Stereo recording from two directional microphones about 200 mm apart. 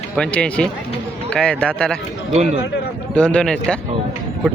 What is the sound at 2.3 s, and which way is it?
Speech, 35° right (ahead or behind).